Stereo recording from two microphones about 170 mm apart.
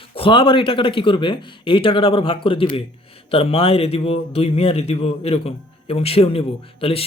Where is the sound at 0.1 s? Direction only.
30° left (ahead or behind).